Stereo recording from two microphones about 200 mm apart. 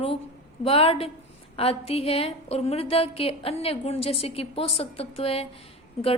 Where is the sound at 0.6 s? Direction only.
30° left (ahead or behind).